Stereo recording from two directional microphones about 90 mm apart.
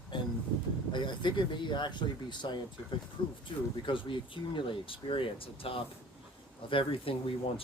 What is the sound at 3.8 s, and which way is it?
Speech, 70° left (ahead or behind).